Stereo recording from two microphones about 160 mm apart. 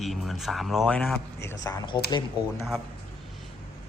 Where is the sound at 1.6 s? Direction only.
15° left (ahead or behind).